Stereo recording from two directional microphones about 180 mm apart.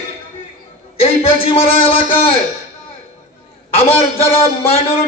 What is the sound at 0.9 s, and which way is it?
Speech, 35° left (ahead or behind).